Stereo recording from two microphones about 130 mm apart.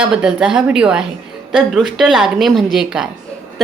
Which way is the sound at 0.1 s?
5° right (ahead or behind).